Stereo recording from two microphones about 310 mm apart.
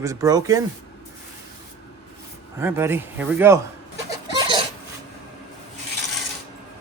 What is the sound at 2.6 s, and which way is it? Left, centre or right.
Speech, centre.